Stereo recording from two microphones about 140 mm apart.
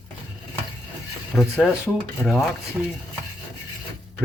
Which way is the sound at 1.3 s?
5° right (ahead or behind).